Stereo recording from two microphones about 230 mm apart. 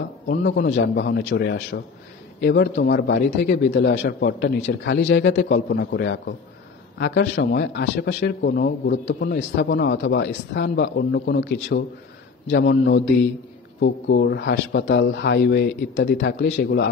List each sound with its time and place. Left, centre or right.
0.3 s a man's voice: left